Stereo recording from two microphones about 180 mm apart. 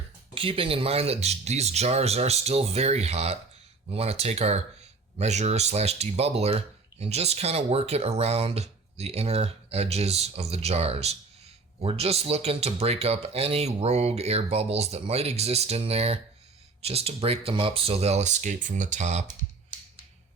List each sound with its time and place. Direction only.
0.3 s speech: 30° right (ahead or behind)